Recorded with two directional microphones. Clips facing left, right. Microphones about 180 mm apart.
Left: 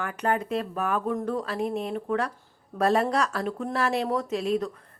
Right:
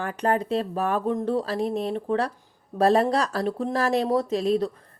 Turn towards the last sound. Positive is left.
turn(degrees=-35)  # may be behind; listen again after turning